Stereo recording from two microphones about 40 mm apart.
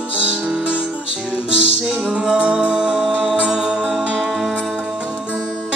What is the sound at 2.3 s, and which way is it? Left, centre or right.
Music, right.